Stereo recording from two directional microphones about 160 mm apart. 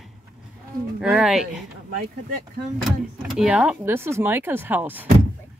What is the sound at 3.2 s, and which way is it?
Speech, 5° right (ahead or behind).